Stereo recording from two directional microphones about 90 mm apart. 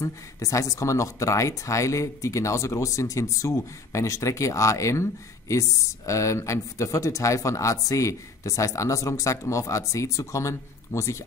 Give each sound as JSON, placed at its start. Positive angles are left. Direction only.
{"t": 0.0, "sound": "speech", "side_deg": 35}